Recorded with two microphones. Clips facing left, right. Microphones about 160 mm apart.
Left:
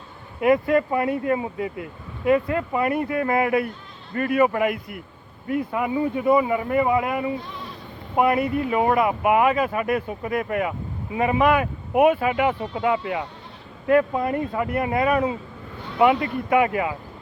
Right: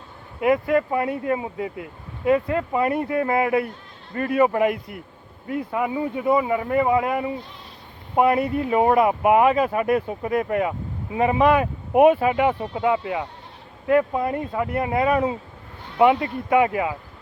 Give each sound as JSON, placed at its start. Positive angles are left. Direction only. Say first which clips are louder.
{"t": 0.4, "sound": "speech", "louder": "left 1 dB", "side_deg": -20}
{"t": 6.0, "sound": "speech", "louder": "left 5 dB", "side_deg": -20}
{"t": 6.3, "sound": "speech", "louder": "even", "side_deg": 15}
{"t": 6.7, "sound": "speech", "louder": "right 1 dB", "side_deg": -25}
{"t": 8.1, "sound": "speech", "louder": "right 1 dB", "side_deg": -30}